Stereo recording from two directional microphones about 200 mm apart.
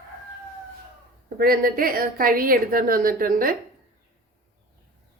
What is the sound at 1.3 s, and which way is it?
A woman's voice, 45° right (ahead or behind).